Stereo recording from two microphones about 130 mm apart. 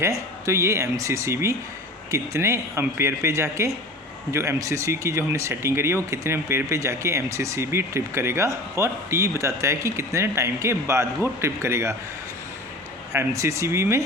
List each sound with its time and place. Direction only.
0.0 s speech: 20° right (ahead or behind)
13.1 s speech: 25° right (ahead or behind)